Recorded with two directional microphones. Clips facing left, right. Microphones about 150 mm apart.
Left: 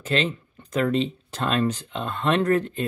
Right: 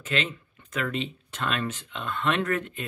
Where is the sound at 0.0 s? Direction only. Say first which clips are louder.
Left 5 dB; 35° left (ahead or behind).